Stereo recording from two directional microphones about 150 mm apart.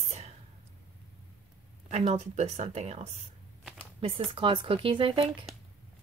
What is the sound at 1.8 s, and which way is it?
Speech, 45° right (ahead or behind).